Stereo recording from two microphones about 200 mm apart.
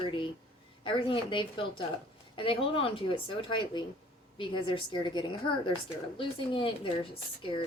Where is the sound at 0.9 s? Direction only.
25° left (ahead or behind).